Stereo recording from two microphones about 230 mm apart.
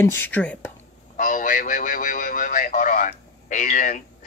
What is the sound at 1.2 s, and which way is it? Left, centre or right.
Radio, left.